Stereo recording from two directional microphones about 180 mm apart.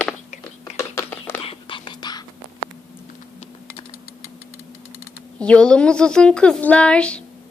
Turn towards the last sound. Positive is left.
turn(degrees=5)  # may be behind; listen again after turning